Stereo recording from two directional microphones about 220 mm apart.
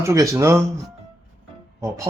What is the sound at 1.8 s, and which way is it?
Speech, 15° right (ahead or behind).